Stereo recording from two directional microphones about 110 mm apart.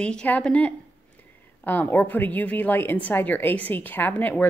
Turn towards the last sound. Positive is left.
turn(degrees=15)  # may be behind; listen again after turning